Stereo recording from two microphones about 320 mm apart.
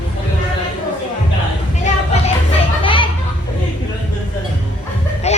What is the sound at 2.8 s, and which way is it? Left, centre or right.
Children playing, centre.